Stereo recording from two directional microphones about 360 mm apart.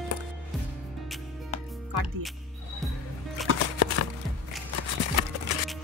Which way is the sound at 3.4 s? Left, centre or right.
Right.